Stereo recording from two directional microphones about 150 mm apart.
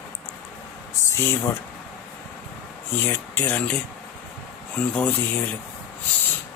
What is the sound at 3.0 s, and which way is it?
Speech, 15° left (ahead or behind).